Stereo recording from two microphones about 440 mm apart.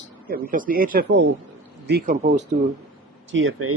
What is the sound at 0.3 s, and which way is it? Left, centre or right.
Speech, centre.